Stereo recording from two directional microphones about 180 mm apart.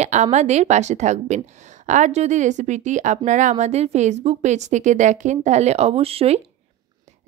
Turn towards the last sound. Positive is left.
turn(degrees=-35)  # may be behind; listen again after turning